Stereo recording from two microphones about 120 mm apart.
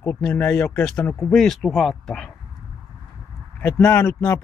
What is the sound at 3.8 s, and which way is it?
Speech, 20° left (ahead or behind).